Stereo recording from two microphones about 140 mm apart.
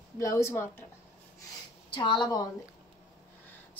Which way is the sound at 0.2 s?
20° left (ahead or behind).